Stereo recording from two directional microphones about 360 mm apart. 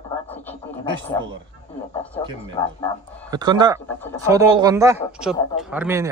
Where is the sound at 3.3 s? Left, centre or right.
Centre.